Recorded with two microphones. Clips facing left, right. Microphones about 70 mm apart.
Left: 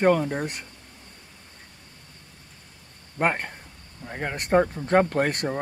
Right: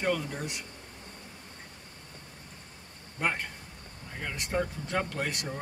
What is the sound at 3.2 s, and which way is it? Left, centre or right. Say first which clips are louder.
Speech: left 7 dB; left.